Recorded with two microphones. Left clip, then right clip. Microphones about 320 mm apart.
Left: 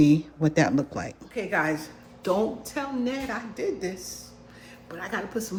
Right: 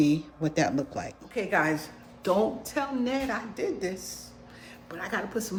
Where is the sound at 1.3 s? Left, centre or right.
Centre.